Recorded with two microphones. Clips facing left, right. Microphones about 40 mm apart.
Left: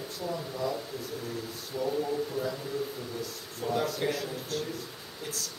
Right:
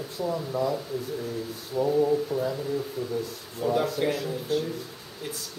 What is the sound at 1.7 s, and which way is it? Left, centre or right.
Speech, centre.